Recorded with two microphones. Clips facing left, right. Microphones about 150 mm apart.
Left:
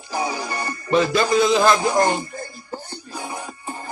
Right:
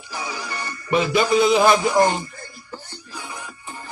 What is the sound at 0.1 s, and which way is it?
Music, 40° left (ahead or behind).